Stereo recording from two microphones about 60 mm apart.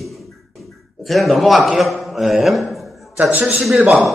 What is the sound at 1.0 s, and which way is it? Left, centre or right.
A man's voice, centre.